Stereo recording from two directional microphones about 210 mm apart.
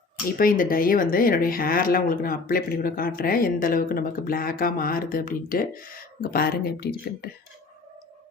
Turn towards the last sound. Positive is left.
turn(degrees=45)  # may be behind; listen again after turning